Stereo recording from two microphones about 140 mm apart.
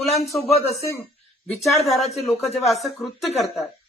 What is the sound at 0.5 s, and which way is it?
Speech, 50° left (ahead or behind).